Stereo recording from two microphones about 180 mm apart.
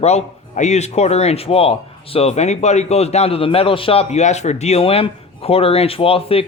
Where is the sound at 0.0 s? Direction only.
40° left (ahead or behind).